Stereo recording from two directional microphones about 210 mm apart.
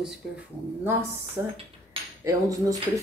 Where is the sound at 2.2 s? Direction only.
15° right (ahead or behind).